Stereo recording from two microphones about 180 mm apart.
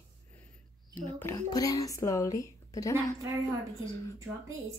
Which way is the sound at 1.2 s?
15° left (ahead or behind).